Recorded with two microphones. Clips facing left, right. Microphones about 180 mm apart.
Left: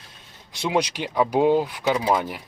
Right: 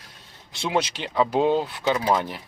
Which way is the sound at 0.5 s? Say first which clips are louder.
Left 2 dB; 15° left (ahead or behind).